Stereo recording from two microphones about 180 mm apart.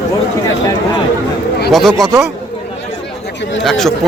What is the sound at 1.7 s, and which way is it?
Speech, centre (ahead or behind).